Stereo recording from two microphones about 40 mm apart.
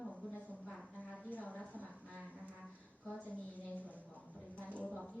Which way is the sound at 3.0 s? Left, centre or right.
Left.